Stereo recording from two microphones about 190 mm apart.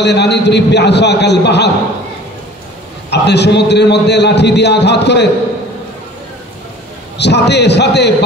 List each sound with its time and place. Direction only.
0.0 s a man's voice: 65° left (ahead or behind)
3.1 s a man's voice: 60° left (ahead or behind)
7.2 s a man's voice: 60° left (ahead or behind)